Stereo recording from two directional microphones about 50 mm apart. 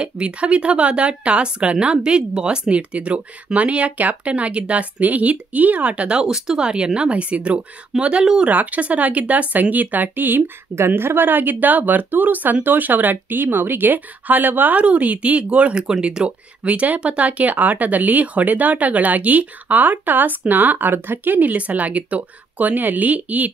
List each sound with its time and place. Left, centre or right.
0.0 s speech: right
14.8 s speech: right